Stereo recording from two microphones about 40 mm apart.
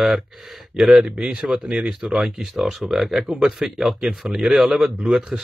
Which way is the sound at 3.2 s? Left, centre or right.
Centre.